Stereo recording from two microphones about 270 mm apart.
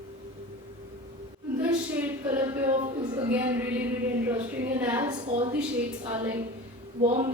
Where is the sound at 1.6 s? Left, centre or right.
Centre.